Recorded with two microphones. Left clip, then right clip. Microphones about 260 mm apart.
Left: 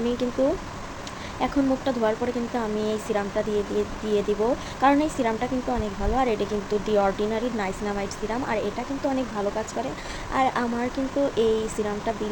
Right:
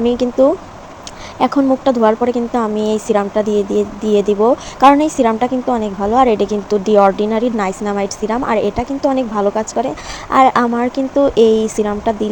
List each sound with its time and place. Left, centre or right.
0.2 s speech: right
1.4 s speech: right